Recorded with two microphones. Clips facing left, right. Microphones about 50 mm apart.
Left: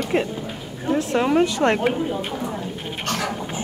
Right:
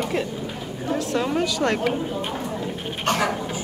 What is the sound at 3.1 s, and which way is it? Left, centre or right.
Speech, centre.